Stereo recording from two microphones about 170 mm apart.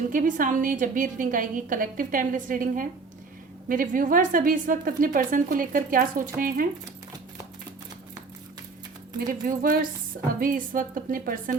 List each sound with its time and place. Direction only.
0.1 s speech: 50° right (ahead or behind)
9.1 s a woman's voice: 55° right (ahead or behind)